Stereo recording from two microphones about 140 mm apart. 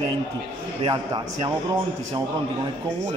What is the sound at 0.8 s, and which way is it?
Speech, 35° right (ahead or behind).